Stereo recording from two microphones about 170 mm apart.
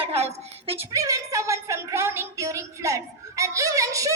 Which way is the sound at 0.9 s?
20° right (ahead or behind).